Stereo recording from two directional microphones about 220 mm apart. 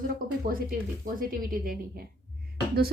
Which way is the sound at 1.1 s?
40° right (ahead or behind).